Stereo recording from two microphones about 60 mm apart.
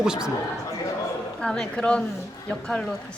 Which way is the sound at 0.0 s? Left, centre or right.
Centre.